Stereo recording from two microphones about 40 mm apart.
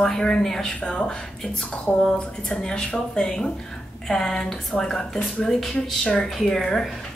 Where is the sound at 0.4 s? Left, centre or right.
Centre.